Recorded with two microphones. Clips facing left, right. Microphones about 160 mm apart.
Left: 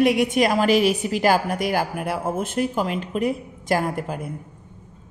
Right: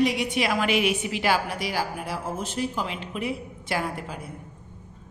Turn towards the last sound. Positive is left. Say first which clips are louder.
# left 6 dB
turn(degrees=50)  # may be behind; listen again after turning